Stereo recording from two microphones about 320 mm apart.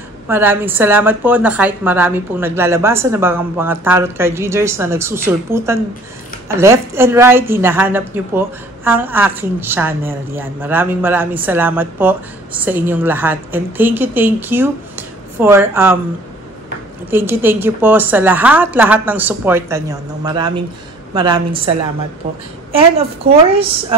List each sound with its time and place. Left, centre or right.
0.3 s a woman's voice: centre
17.1 s a woman's voice: centre
22.7 s a woman's voice: centre